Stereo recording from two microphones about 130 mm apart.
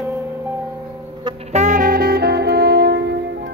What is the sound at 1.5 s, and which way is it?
Saxophone, 70° right (ahead or behind).